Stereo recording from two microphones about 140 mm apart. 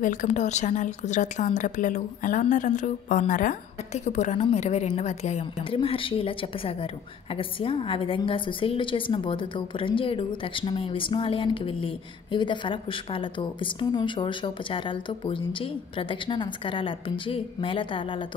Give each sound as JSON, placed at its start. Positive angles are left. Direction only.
{"t": 0.0, "sound": "speech", "side_deg": 65}